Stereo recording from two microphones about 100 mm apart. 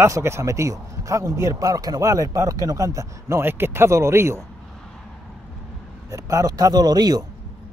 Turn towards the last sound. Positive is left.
turn(degrees=-40)  # may be behind; listen again after turning